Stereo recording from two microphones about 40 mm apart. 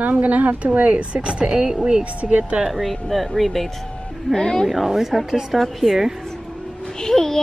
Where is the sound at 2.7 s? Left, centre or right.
Centre.